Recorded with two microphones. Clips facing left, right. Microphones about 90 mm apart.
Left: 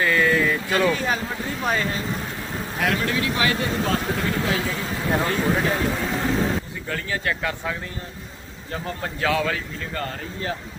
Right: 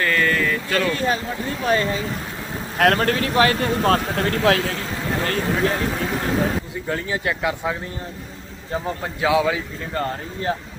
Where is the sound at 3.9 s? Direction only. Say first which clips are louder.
Right 4 dB; 65° right (ahead or behind).